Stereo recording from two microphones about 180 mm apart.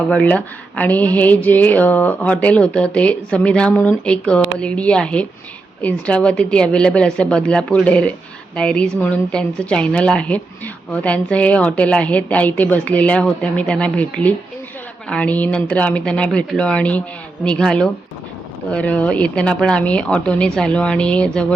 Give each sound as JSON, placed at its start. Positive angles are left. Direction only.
{"t": 0.1, "sound": "speech", "side_deg": 5}